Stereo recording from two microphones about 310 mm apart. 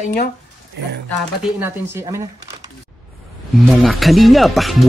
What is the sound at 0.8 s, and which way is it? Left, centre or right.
Speech, right.